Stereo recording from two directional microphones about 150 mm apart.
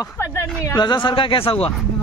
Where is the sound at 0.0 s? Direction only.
20° left (ahead or behind); by 1.7 s 40° left (ahead or behind).